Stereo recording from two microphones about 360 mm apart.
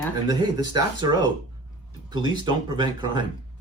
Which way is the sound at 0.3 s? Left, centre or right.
Centre.